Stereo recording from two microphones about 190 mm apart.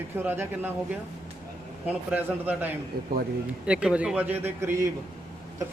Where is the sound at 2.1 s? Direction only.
5° right (ahead or behind).